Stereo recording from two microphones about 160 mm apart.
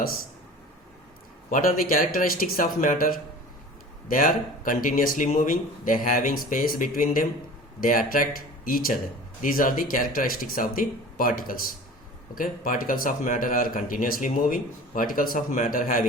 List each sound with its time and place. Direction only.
1.5 s speech: 60° left (ahead or behind)